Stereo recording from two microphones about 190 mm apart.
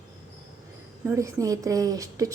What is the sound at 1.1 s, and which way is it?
A woman's voice, 15° right (ahead or behind).